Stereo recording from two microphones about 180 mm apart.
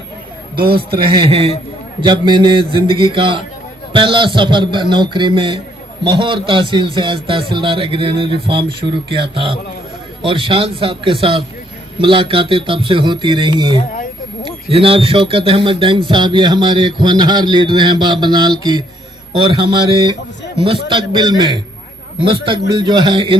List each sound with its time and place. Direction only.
0.5 s a man's voice: 55° right (ahead or behind)
1.0 s a man's voice: 30° right (ahead or behind)